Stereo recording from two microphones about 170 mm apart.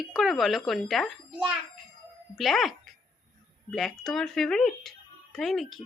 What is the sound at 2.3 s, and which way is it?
Speech, centre (ahead or behind).